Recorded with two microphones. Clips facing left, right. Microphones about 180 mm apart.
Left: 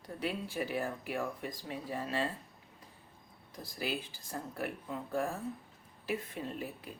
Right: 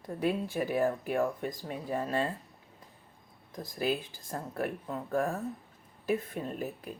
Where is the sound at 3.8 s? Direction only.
50° right (ahead or behind).